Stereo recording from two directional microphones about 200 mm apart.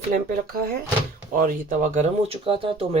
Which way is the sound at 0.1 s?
45° right (ahead or behind).